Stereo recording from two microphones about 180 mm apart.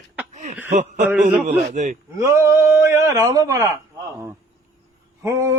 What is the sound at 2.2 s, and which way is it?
A man's voice, 15° right (ahead or behind).